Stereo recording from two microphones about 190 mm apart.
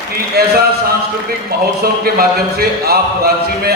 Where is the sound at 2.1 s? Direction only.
55° right (ahead or behind).